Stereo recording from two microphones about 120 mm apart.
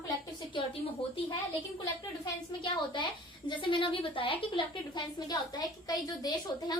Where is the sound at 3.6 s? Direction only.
45° left (ahead or behind).